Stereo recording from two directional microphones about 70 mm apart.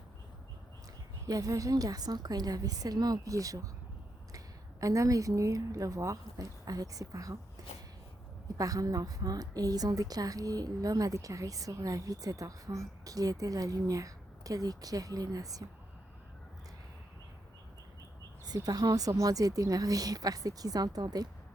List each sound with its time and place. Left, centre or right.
1.3 s a woman's voice: right
8.5 s a woman's voice: right
18.4 s a woman's voice: right